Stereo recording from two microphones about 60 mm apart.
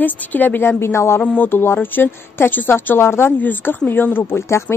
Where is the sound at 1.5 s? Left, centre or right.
Left.